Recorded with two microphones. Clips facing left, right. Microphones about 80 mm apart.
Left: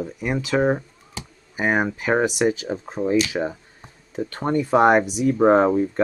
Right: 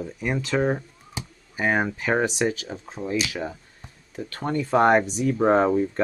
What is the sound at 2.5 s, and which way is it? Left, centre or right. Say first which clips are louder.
Speech: left 7 dB; left.